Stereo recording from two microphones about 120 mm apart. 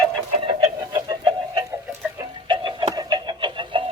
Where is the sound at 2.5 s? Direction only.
35° right (ahead or behind).